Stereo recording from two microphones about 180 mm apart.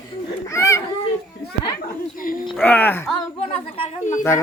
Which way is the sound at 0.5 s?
15° left (ahead or behind).